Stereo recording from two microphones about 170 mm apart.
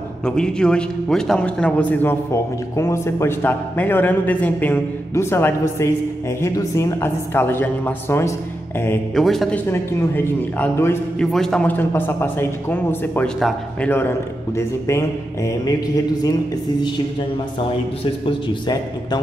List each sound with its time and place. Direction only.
0.2 s a man's voice: 5° left (ahead or behind)
9.1 s a man's voice: centre (ahead or behind)
9.7 s a man's voice: 15° left (ahead or behind)
18.2 s speech: 30° left (ahead or behind)